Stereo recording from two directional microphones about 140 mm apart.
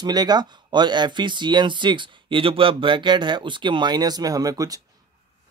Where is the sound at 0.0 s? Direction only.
30° right (ahead or behind).